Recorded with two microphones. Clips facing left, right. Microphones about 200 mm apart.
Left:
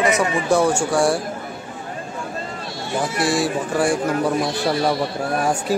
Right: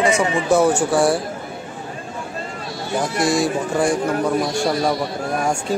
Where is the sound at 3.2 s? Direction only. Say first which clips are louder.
Right 2 dB; 5° left (ahead or behind).